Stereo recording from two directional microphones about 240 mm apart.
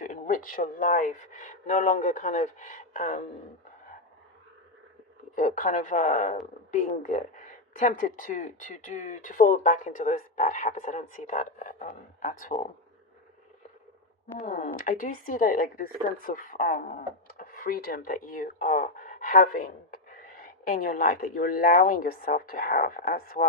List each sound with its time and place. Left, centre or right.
0.0 s speech: left
5.3 s speech: left
14.4 s speech: left